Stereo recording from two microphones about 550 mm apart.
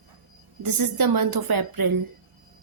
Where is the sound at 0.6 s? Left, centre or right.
Right.